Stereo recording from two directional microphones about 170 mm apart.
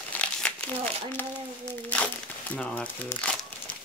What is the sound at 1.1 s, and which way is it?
Speech, 10° left (ahead or behind).